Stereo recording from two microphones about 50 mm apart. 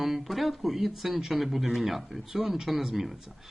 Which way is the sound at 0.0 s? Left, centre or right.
Centre.